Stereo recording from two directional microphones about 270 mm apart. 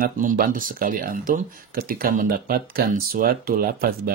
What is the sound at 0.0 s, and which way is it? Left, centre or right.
Speech, right.